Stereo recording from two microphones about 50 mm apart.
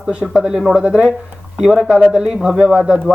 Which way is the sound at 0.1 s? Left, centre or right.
Centre.